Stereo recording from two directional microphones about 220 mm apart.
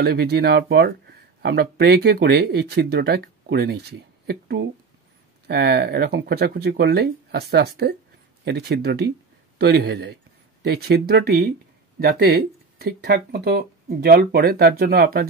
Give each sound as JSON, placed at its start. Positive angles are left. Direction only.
{"t": 0.0, "sound": "speech", "side_deg": -45}